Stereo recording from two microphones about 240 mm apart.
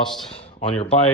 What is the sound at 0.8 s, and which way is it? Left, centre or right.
Speech, left.